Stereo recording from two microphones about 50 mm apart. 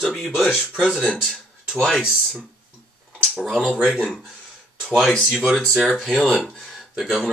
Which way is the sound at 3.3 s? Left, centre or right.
Centre.